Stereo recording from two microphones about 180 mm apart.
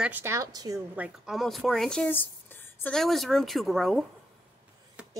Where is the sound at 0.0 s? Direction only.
10° right (ahead or behind).